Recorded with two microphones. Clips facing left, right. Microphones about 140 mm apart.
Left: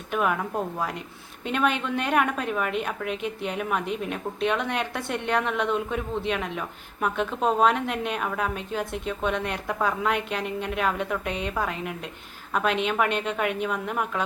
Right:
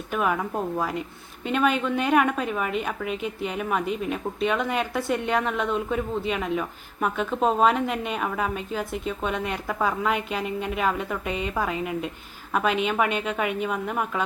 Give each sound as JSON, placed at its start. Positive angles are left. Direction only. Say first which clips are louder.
{"t": 0.1, "sound": "a woman's voice", "louder": "even", "side_deg": 0}